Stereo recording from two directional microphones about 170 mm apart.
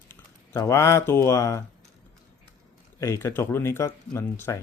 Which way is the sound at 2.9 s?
20° left (ahead or behind).